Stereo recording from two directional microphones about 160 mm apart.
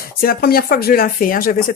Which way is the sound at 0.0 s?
65° left (ahead or behind).